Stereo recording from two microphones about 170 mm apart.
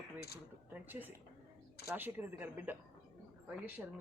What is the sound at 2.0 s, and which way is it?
Speech, 10° right (ahead or behind).